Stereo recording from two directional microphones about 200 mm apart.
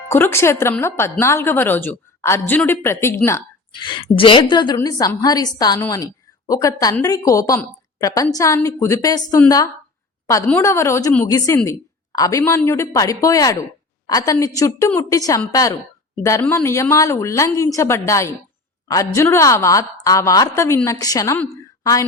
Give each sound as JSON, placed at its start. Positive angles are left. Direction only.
{"t": 0.1, "sound": "a woman's voice", "side_deg": 10}
{"t": 3.7, "sound": "a woman's voice", "side_deg": 25}